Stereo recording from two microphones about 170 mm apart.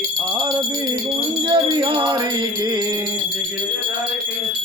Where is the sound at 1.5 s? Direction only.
25° right (ahead or behind).